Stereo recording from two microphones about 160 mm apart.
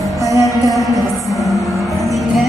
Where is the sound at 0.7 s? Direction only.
Centre (ahead or behind).